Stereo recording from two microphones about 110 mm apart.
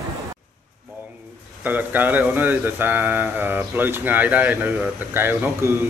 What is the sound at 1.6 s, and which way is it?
Speech, 15° right (ahead or behind).